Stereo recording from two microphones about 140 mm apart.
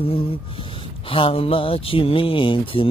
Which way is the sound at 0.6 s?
40° left (ahead or behind).